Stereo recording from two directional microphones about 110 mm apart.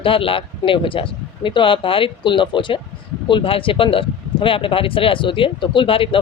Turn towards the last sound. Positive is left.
turn(degrees=55)  # may be behind; listen again after turning